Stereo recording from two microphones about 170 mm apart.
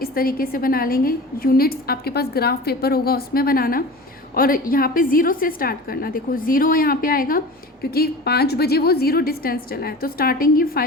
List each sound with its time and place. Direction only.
0.0 s a woman's voice: 60° left (ahead or behind)